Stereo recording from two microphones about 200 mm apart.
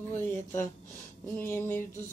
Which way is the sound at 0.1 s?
10° left (ahead or behind).